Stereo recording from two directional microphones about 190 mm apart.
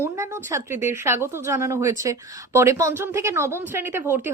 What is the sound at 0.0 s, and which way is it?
A woman's voice, 15° right (ahead or behind).